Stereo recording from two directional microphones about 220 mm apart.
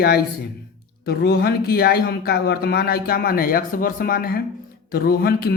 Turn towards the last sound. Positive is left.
turn(degrees=45)  # may be behind; listen again after turning